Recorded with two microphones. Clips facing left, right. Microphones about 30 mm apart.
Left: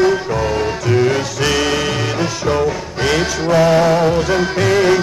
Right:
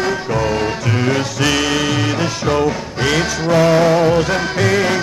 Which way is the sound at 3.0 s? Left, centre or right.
Right.